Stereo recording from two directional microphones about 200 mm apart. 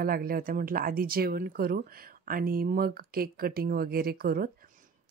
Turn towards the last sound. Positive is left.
turn(degrees=-45)  # may be behind; listen again after turning